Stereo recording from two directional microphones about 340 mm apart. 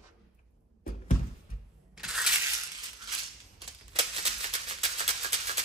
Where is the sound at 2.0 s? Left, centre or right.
Centre.